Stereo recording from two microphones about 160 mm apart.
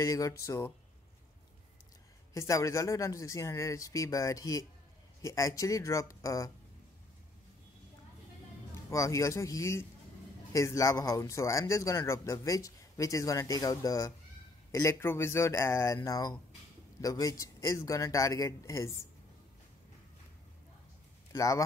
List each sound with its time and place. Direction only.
0.0 s speech: 20° left (ahead or behind)
2.3 s speech: 20° left (ahead or behind)
8.9 s speech: 20° left (ahead or behind)
21.3 s speech: 20° left (ahead or behind)